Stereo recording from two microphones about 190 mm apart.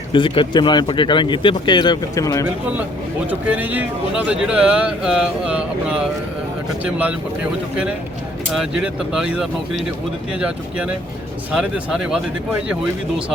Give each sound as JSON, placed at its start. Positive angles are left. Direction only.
{"t": 0.1, "sound": "speech", "side_deg": 25}
{"t": 3.2, "sound": "a man's voice", "side_deg": -10}
{"t": 8.5, "sound": "speech", "side_deg": -5}